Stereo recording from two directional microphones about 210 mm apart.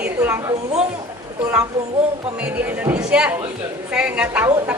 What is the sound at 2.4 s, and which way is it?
A woman's voice, 5° right (ahead or behind).